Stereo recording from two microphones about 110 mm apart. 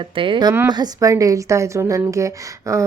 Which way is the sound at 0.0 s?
55° right (ahead or behind).